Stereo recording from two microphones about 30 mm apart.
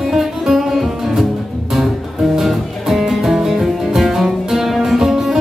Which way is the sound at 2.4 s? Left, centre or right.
Centre.